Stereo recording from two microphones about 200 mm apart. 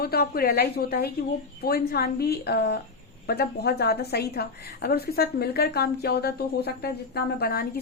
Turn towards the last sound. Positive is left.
turn(degrees=50)  # may be behind; listen again after turning